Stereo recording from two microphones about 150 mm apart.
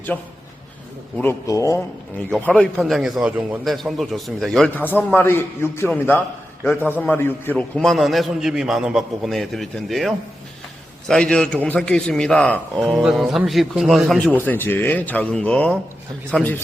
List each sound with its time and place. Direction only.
0.1 s a man's voice: 10° left (ahead or behind)
2.4 s a man's voice: 5° left (ahead or behind)
4.8 s a man's voice: 10° left (ahead or behind)
7.8 s a man's voice: centre (ahead or behind)
14.3 s a man's voice: 15° left (ahead or behind)